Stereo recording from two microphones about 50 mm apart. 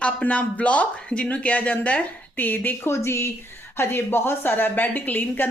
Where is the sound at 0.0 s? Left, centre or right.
Left.